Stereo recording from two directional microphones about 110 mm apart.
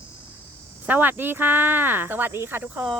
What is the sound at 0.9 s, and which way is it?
Speech, 15° right (ahead or behind).